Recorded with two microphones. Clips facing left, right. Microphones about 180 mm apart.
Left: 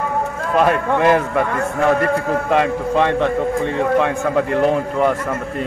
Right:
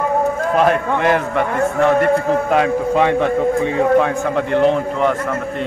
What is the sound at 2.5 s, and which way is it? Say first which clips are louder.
Speech: left 1 dB; 5° right (ahead or behind).